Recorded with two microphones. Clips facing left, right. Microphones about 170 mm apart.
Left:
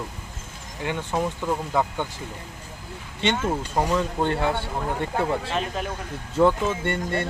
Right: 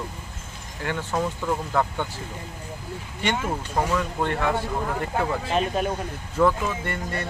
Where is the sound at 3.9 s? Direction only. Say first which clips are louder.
Left 2 dB; 25° left (ahead or behind).